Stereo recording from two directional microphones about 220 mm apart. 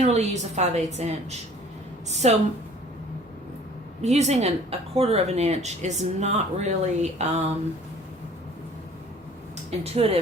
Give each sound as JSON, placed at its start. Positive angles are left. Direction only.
{"t": 0.0, "sound": "speech", "side_deg": -30}
{"t": 4.0, "sound": "speech", "side_deg": -30}
{"t": 9.6, "sound": "speech", "side_deg": -30}